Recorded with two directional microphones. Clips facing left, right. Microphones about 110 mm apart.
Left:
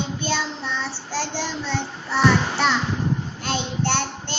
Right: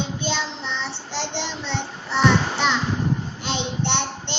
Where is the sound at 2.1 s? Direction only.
5° left (ahead or behind).